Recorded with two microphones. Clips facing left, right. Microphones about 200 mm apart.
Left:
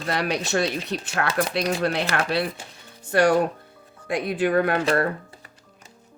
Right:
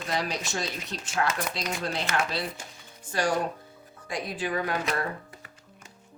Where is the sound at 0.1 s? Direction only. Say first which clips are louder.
Left 7 dB; 65° left (ahead or behind).